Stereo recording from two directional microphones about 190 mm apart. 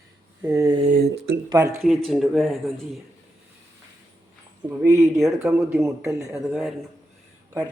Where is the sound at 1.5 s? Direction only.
15° right (ahead or behind).